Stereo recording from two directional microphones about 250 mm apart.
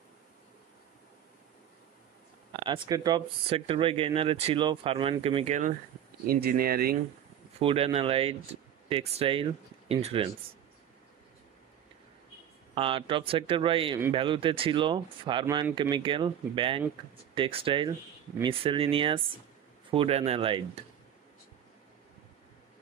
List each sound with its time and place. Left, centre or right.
2.6 s speech: centre; by 7.0 s right
7.6 s speech: right
12.7 s speech: right